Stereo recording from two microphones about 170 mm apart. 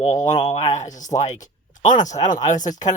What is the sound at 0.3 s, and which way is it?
Speech, 25° left (ahead or behind).